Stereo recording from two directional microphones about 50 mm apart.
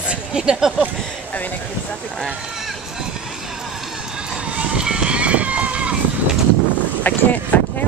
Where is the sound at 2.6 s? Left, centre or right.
Centre.